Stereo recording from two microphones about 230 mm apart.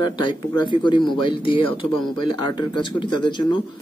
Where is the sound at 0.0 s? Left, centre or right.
Left.